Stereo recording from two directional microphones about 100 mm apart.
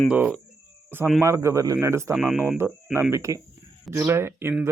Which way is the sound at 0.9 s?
20° right (ahead or behind).